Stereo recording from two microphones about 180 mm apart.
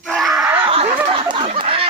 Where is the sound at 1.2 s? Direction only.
30° right (ahead or behind).